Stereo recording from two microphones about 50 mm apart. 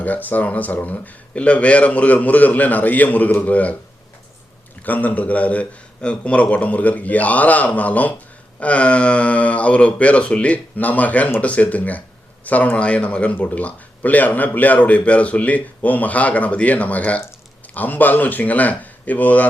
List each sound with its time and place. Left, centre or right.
0.0 s speech: left
4.9 s speech: left